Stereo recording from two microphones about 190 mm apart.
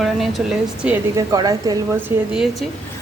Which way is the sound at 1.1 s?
20° right (ahead or behind).